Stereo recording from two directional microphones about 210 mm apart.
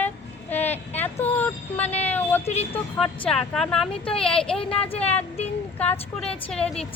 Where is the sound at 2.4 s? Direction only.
30° left (ahead or behind).